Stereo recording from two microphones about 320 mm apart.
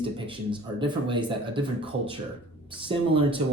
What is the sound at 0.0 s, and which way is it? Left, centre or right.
Speech, centre.